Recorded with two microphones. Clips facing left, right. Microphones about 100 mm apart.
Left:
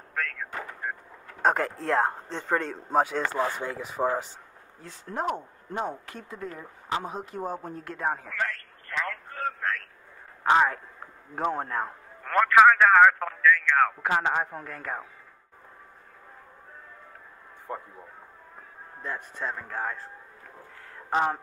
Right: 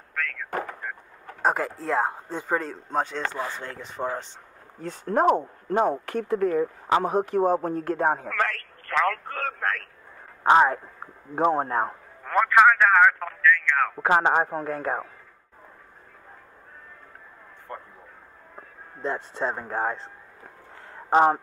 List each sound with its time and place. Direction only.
0.1 s a sound: 5° left (ahead or behind)
0.5 s a sound: 55° right (ahead or behind)
1.4 s speech: 5° right (ahead or behind)
4.8 s speech: 60° right (ahead or behind); by 8.2 s 40° right (ahead or behind)
8.3 s speech: 75° right (ahead or behind)
10.4 s speech: 25° right (ahead or behind)
12.2 s speech: 5° right (ahead or behind)
13.9 s speech: 35° right (ahead or behind)
17.7 s speech: 5° left (ahead or behind)
18.9 s speech: 25° right (ahead or behind)
21.1 s speech: 35° right (ahead or behind)